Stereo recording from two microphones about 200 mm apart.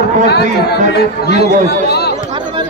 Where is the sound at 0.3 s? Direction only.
55° left (ahead or behind).